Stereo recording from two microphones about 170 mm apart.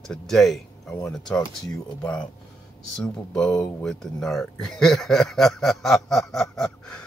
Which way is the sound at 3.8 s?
5° left (ahead or behind).